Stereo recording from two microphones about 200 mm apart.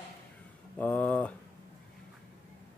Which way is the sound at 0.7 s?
10° left (ahead or behind).